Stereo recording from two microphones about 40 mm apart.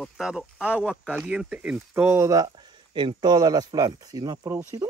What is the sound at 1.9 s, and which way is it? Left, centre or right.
Speech, right.